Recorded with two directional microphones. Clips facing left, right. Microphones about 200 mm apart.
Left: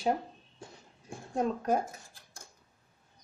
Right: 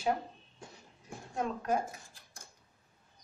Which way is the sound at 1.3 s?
35° left (ahead or behind).